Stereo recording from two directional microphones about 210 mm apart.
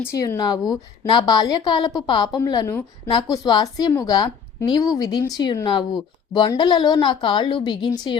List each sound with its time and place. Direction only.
0.0 s a woman's voice: 15° left (ahead or behind)